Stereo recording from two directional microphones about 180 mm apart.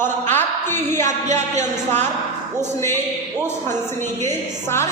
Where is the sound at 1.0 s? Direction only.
40° right (ahead or behind).